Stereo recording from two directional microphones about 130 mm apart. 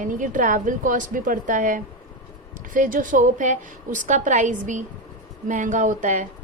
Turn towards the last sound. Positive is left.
turn(degrees=-75)  # may be behind; listen again after turning